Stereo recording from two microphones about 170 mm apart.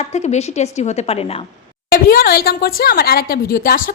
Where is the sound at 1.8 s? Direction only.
60° left (ahead or behind).